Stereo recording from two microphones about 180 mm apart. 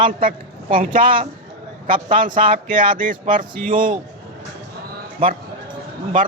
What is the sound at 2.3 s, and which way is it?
Speech, 30° right (ahead or behind).